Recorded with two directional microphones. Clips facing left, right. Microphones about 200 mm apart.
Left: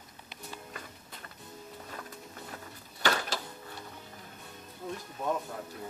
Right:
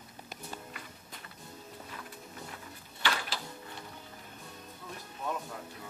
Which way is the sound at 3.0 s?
45° left (ahead or behind).